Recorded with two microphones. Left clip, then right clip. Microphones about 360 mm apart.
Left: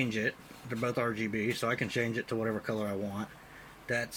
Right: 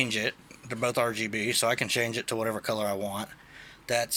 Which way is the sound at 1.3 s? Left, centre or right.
Right.